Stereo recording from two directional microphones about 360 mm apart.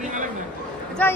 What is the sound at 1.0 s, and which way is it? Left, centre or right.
Speech, centre.